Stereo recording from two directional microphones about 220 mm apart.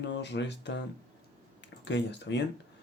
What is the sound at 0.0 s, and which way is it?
Speech, 55° left (ahead or behind).